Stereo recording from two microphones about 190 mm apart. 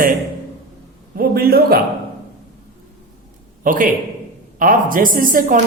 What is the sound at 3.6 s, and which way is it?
A man's voice, 45° right (ahead or behind).